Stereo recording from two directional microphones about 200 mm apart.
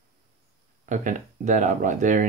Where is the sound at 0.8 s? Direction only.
40° right (ahead or behind).